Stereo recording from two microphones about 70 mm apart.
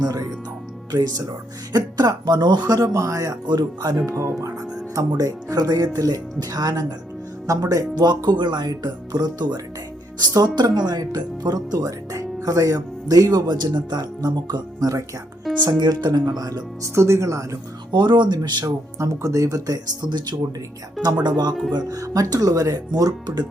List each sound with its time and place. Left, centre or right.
0.0 s speech: right
0.9 s speech: right
3.4 s speech: right
4.4 s speech: right
4.9 s speech: right
7.4 s speech: right
15.5 s music: centre
15.8 s speech: right
16.8 s speech: right
17.9 s speech: right
18.9 s speech: right
21.2 s speech: right